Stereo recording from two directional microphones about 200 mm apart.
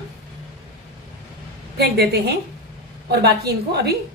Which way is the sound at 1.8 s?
55° right (ahead or behind).